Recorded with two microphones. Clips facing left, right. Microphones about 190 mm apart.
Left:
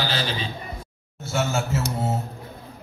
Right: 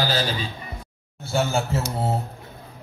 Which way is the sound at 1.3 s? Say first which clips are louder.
Right 2 dB; 30° right (ahead or behind).